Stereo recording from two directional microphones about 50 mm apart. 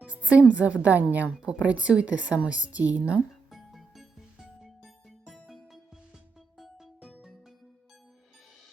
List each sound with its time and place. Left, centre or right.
0.0 s a woman's voice: right
3.5 s music: centre
7.0 s music: centre